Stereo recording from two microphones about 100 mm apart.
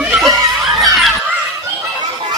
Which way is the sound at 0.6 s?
Centre (ahead or behind).